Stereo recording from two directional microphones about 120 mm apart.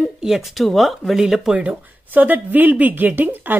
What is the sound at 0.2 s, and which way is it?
Speech, 5° right (ahead or behind).